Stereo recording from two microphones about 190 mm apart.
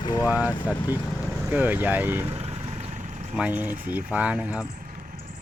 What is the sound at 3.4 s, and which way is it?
Speech, 10° right (ahead or behind).